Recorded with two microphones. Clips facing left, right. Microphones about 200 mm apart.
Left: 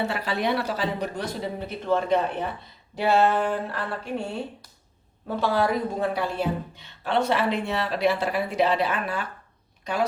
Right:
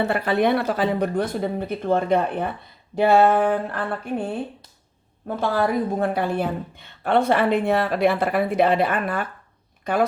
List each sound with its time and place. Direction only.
0.1 s a woman's voice: 55° right (ahead or behind)
5.4 s a woman's voice: 50° right (ahead or behind)